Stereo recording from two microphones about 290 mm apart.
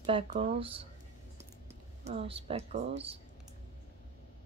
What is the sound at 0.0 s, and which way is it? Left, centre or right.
Speech, centre.